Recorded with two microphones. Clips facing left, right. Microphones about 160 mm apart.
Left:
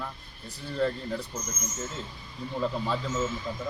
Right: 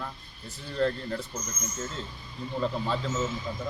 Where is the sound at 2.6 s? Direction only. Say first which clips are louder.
Even; 5° left (ahead or behind).